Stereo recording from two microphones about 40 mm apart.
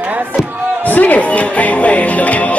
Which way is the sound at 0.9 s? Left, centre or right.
Left.